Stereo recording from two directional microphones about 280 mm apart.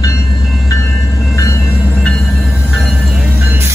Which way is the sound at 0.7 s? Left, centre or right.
Centre.